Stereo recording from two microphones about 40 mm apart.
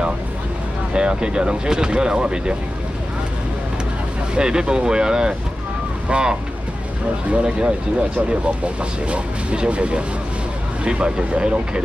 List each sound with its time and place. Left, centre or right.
0.9 s speech: right
4.4 s speech: centre
9.0 s speech: right